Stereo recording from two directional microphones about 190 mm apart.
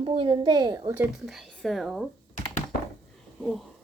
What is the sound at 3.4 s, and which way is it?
Speech, centre (ahead or behind).